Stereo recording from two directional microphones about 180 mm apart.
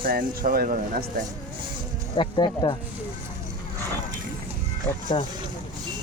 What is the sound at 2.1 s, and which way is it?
Speech, 25° left (ahead or behind).